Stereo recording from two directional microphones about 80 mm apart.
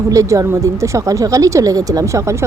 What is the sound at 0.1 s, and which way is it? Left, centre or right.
A woman's voice, right.